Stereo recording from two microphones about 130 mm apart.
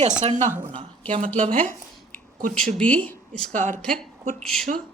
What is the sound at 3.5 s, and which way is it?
Speech, 85° right.